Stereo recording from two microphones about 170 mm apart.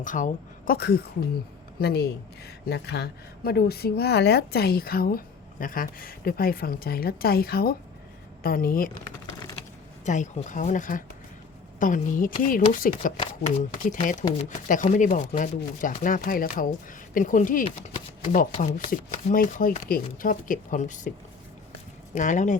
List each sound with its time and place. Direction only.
0.0 s speech: 50° left (ahead or behind)
10.1 s speech: 45° left (ahead or behind)
18.9 s speech: 55° left (ahead or behind)
22.1 s speech: 50° left (ahead or behind)